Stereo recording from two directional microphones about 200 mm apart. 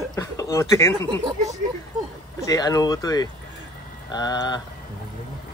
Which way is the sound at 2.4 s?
20° left (ahead or behind).